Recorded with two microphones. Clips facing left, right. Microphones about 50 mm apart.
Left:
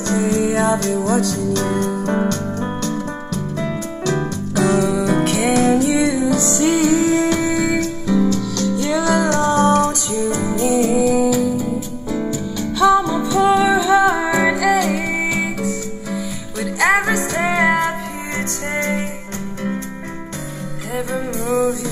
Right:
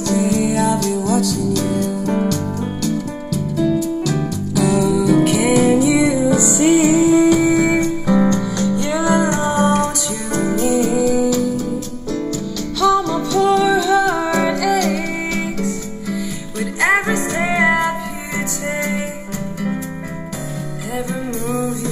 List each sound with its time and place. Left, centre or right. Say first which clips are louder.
0.0 s music: right 1 dB; left
6.3 s music: right 3 dB; centre
10.5 s music: right 1 dB; left
10.9 s music: left 1 dB; centre
12.7 s music: left 1 dB; centre
16.8 s music: even; centre
20.9 s music: left 1 dB; centre